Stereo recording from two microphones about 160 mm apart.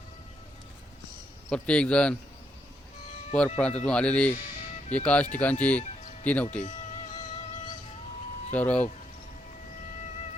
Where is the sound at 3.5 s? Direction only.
5° left (ahead or behind).